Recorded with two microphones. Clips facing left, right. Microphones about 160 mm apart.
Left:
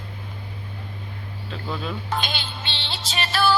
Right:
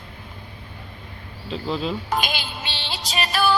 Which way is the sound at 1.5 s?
25° right (ahead or behind).